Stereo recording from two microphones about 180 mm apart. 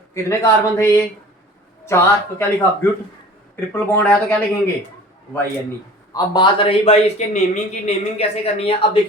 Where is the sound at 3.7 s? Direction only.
10° left (ahead or behind).